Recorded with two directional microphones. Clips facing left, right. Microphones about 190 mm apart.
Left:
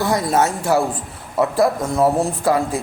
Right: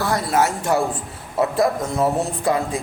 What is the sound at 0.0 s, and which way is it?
Speech, 20° left (ahead or behind).